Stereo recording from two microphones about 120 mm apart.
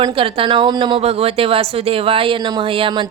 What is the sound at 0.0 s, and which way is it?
Speech, 45° right (ahead or behind).